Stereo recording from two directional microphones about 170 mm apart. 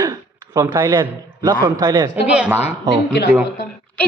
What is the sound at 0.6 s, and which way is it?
Speech, 25° right (ahead or behind).